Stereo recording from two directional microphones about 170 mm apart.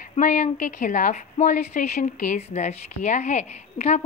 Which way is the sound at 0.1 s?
45° left (ahead or behind).